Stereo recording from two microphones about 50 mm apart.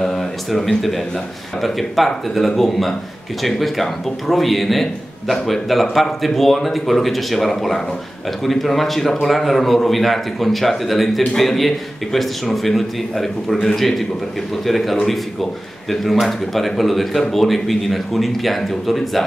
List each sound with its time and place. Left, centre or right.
0.0 s a man's voice: centre